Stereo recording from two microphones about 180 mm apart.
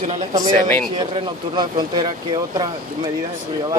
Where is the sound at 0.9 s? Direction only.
25° right (ahead or behind).